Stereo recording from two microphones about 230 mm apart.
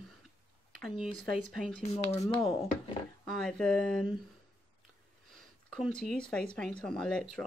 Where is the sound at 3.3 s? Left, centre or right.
Centre.